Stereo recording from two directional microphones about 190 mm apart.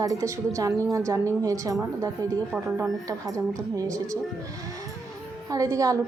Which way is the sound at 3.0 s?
15° right (ahead or behind).